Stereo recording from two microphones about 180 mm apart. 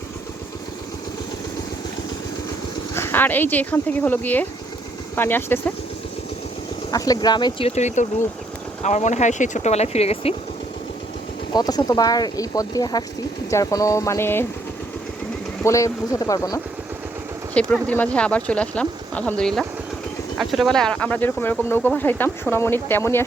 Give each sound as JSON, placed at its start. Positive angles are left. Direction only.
{"t": 2.9, "sound": "speech", "side_deg": 15}
{"t": 6.9, "sound": "speech", "side_deg": 20}
{"t": 7.8, "sound": "speech", "side_deg": 40}
{"t": 11.5, "sound": "speech", "side_deg": 20}
{"t": 15.6, "sound": "speech", "side_deg": 15}
{"t": 17.5, "sound": "speech", "side_deg": 5}